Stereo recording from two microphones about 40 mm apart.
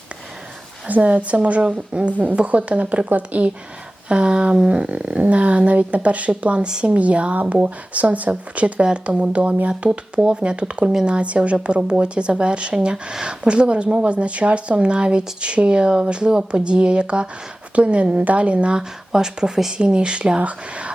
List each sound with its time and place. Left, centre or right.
0.9 s speech: right
4.1 s speech: right
6.7 s speech: right
6.9 s speech: right
8.8 s speech: right
18.8 s speech: centre
19.7 s speech: right